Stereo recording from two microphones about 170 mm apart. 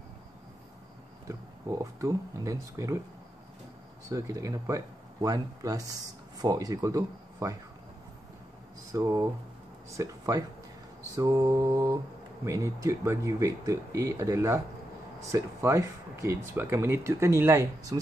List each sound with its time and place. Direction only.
1.2 s speech: 20° right (ahead or behind)
4.1 s speech: 20° right (ahead or behind)
8.9 s speech: 15° right (ahead or behind)